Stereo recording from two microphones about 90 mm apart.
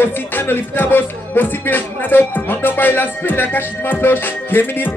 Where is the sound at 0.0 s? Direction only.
25° left (ahead or behind).